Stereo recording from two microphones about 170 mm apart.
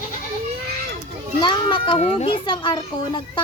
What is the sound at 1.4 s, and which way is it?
Speech, 30° left (ahead or behind).